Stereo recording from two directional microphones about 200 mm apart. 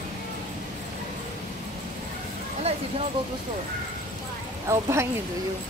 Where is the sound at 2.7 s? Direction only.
30° right (ahead or behind).